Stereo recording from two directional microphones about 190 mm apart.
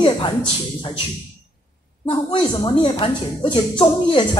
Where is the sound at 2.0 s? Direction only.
25° left (ahead or behind).